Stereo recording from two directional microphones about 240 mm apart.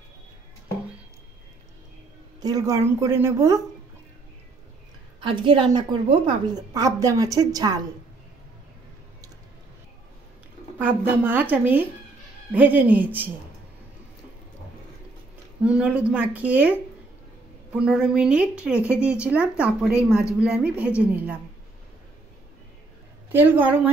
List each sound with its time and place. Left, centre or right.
2.4 s a woman's voice: centre
5.2 s a woman's voice: right
10.8 s a woman's voice: centre
15.6 s a woman's voice: centre
17.7 s a woman's voice: centre
23.3 s a woman's voice: centre